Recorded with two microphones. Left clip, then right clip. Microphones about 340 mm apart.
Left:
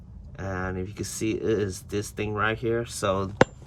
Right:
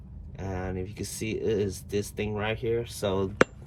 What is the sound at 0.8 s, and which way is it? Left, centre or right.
Speech, left.